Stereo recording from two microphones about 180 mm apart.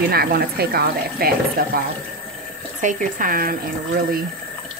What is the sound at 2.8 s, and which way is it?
Speech, 45° right (ahead or behind).